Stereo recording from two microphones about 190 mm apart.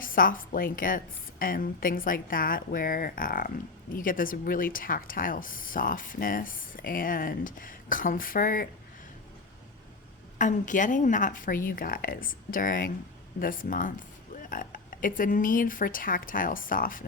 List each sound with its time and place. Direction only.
0.0 s a woman's voice: 45° left (ahead or behind)
10.3 s a woman's voice: 40° left (ahead or behind)